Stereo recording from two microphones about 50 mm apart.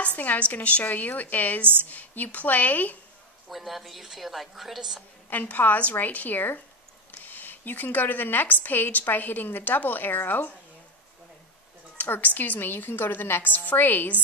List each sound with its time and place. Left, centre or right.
0.0 s a woman's voice: left
3.4 s a woman's voice: centre
5.3 s a woman's voice: left
12.0 s a woman's voice: left